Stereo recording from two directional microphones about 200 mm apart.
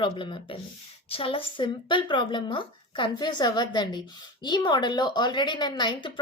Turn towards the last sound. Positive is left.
turn(degrees=25)  # may be behind; listen again after turning